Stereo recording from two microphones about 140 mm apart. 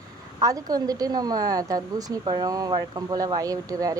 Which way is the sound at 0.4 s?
25° right (ahead or behind).